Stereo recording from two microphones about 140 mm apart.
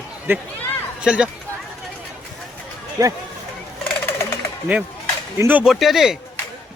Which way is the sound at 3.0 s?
25° right (ahead or behind).